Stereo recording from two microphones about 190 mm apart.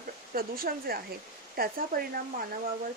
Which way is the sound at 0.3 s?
50° right (ahead or behind).